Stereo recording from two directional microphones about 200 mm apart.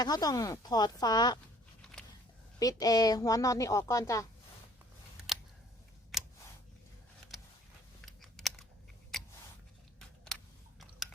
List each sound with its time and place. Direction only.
0.0 s speech: 20° left (ahead or behind)
1.8 s a sound: 5° left (ahead or behind)
2.6 s speech: 20° left (ahead or behind)
6.1 s scissors: centre (ahead or behind)
8.0 s computer keyboard: centre (ahead or behind)
9.1 s scissors: centre (ahead or behind)